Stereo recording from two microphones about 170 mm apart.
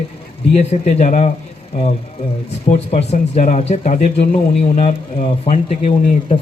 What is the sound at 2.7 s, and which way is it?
Speech, 40° left (ahead or behind).